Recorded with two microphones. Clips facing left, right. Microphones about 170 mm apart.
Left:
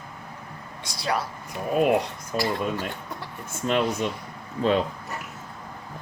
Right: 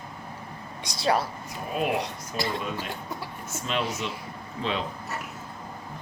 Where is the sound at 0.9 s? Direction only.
25° right (ahead or behind).